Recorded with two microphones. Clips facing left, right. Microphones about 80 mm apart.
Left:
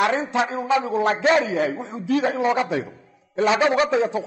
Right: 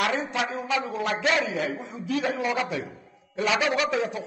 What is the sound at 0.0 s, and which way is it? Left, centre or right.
A man's voice, left.